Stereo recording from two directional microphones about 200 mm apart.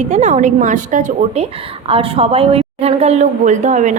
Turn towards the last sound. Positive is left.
turn(degrees=-35)  # may be behind; listen again after turning